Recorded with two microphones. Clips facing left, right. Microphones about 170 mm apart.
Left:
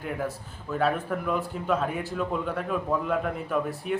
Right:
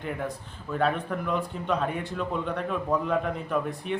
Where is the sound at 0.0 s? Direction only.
5° left (ahead or behind).